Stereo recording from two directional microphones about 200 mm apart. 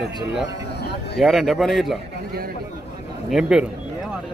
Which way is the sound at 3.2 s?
5° right (ahead or behind).